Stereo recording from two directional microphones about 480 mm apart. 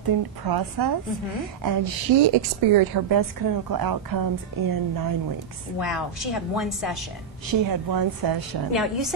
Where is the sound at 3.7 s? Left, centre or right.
Right.